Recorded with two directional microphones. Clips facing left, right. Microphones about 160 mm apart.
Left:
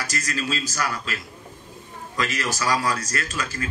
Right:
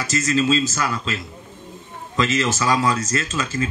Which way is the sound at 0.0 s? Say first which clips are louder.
Right 9 dB; 25° right (ahead or behind).